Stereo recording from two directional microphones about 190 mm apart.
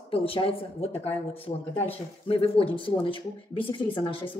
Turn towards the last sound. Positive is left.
turn(degrees=25)  # may be behind; listen again after turning